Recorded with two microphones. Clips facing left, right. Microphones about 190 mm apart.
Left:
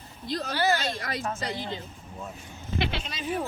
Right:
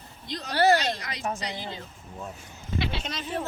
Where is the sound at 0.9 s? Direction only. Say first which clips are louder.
Left 5 dB; 50° left (ahead or behind).